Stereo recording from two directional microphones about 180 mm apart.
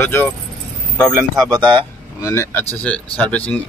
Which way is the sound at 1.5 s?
25° right (ahead or behind).